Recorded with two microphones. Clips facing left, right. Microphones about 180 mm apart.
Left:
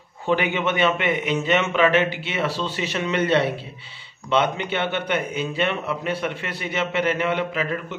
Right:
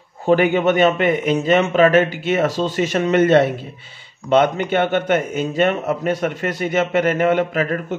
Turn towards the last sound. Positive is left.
turn(degrees=-45)  # may be behind; listen again after turning